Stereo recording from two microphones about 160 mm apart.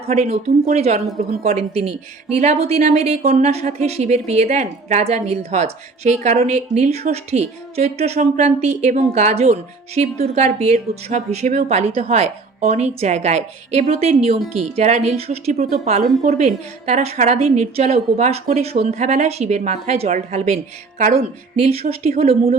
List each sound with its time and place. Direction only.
0.0 s speech: 40° right (ahead or behind)
21.0 s a woman's voice: 70° right (ahead or behind)
21.5 s speech: 40° right (ahead or behind)
22.2 s speech: 65° right (ahead or behind)